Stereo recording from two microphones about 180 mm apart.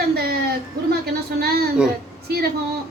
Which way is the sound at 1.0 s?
60° right (ahead or behind).